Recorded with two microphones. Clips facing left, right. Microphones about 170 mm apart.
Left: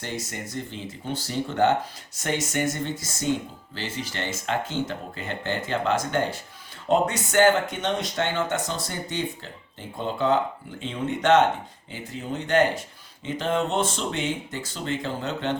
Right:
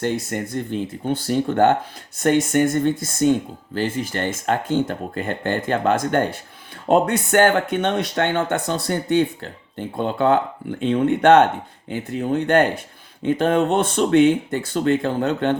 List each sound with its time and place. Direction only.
0.0 s speech: 55° right (ahead or behind)